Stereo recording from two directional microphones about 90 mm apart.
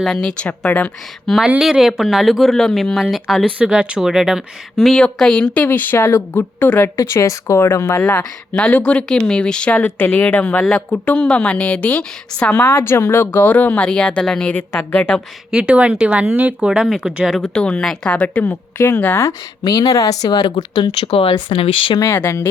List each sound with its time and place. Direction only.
0.0 s speech: 5° left (ahead or behind)
1.5 s speech: 10° right (ahead or behind)
3.6 s speech: 10° right (ahead or behind); by 5.6 s 10° left (ahead or behind)
5.6 s a woman's voice: 20° left (ahead or behind)
6.9 s speech: 35° left (ahead or behind)
8.5 s speech: 10° left (ahead or behind)
14.7 s a woman's voice: 25° left (ahead or behind)
15.5 s speech: 10° right (ahead or behind)
17.3 s a woman's voice: 10° left (ahead or behind)
19.6 s speech: 45° left (ahead or behind); by 21.9 s 90° left
22.0 s speech: 30° left (ahead or behind)